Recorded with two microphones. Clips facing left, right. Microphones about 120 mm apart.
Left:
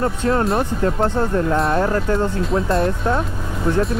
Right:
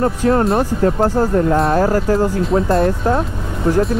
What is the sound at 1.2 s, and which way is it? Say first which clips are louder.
Speech: right 4 dB; 30° right (ahead or behind).